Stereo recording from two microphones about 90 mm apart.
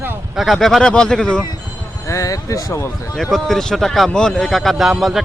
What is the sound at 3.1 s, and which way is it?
A man's voice, 5° left (ahead or behind).